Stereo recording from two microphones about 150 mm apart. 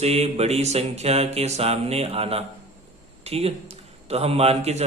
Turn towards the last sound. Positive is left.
turn(degrees=-45)  # may be behind; listen again after turning